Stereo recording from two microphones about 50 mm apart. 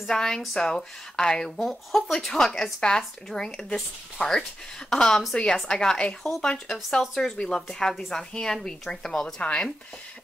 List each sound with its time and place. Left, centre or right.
0.1 s speech: centre
1.6 s speech: centre
9.4 s speech: left